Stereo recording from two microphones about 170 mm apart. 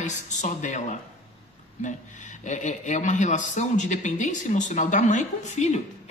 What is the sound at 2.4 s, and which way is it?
Speech, 45° left (ahead or behind).